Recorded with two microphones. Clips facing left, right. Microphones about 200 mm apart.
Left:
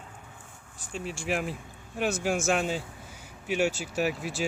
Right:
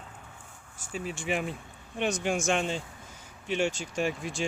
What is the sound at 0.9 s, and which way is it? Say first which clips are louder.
Speech: even; centre (ahead or behind).